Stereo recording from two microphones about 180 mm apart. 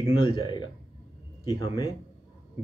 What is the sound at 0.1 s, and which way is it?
Speech, 25° left (ahead or behind).